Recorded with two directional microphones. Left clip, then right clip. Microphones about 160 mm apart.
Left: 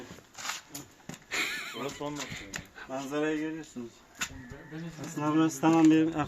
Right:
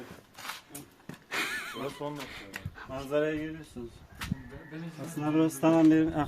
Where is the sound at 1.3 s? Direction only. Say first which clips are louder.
Even; 20° right (ahead or behind).